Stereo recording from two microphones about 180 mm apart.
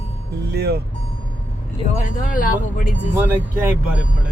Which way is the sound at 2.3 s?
50° left (ahead or behind).